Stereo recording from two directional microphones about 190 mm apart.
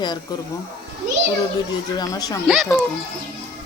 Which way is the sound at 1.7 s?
20° left (ahead or behind).